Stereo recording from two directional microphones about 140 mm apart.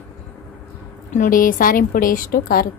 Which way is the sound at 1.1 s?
75° left (ahead or behind).